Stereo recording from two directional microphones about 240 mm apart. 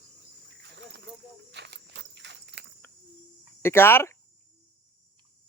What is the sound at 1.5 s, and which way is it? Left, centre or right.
Horse, right.